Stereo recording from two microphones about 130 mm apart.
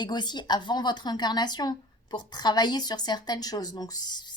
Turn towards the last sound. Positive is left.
turn(degrees=30)  # may be behind; listen again after turning